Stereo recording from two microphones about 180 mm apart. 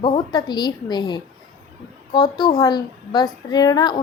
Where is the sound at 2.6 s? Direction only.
20° left (ahead or behind).